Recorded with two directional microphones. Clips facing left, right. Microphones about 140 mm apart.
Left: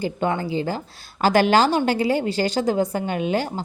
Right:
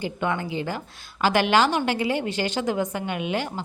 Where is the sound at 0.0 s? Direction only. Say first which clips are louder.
Left 3 dB; 35° left (ahead or behind).